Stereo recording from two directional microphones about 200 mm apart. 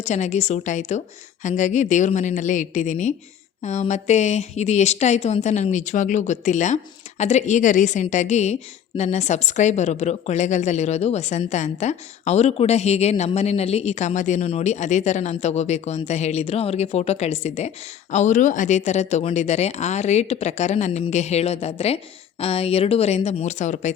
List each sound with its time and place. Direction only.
0.0 s a woman's voice: 35° left (ahead or behind)